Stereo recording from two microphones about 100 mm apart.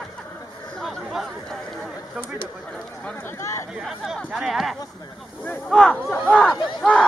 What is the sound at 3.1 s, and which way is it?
Speech, 30° left (ahead or behind).